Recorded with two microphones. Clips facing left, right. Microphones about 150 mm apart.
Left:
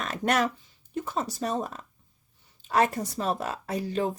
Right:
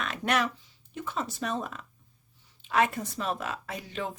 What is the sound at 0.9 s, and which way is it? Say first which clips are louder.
Speech: left 3 dB; 40° left (ahead or behind).